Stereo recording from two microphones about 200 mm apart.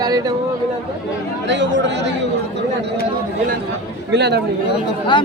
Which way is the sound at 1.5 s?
60° right (ahead or behind).